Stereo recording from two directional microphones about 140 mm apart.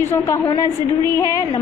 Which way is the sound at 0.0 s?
15° left (ahead or behind).